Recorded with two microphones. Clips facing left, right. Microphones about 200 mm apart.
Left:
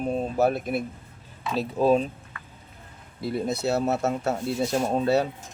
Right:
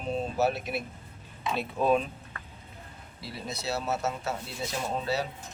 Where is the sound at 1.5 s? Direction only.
35° left (ahead or behind).